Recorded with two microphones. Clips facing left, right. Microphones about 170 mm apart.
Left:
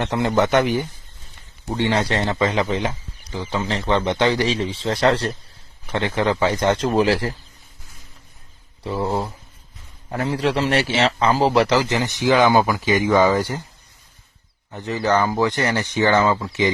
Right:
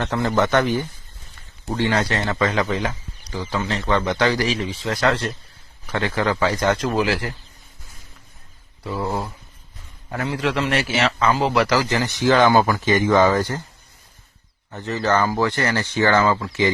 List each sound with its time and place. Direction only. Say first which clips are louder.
0.0 s a man's voice: left 1 dB; 20° left (ahead or behind)
8.8 s a man's voice: left 2 dB; 25° left (ahead or behind)
14.7 s a man's voice: left 1 dB; 15° left (ahead or behind)